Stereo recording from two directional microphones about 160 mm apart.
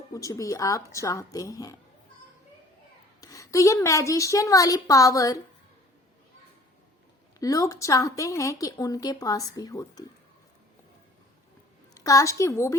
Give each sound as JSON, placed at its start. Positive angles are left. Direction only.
{"t": 0.1, "sound": "speech", "side_deg": 20}
{"t": 3.2, "sound": "speech", "side_deg": 20}
{"t": 7.3, "sound": "speech", "side_deg": 20}
{"t": 11.9, "sound": "speech", "side_deg": 20}